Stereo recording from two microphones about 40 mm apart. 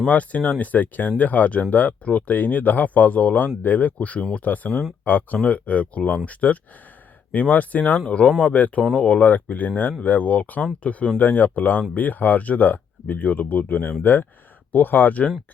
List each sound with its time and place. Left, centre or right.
0.1 s speech: left
5.4 s speech: left
8.0 s speech: left